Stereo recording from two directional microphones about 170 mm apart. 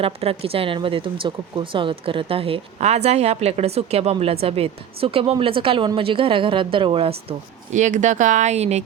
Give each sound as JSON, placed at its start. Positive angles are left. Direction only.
{"t": 0.0, "sound": "speech", "side_deg": -35}
{"t": 7.3, "sound": "speech", "side_deg": -45}